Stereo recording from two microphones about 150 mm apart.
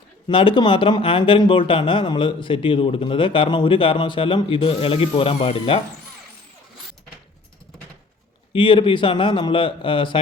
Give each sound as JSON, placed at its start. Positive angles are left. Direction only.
{"t": 0.3, "sound": "speech", "side_deg": 35}
{"t": 8.5, "sound": "speech", "side_deg": 35}